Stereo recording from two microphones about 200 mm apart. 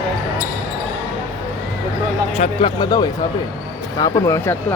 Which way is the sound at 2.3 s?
30° left (ahead or behind).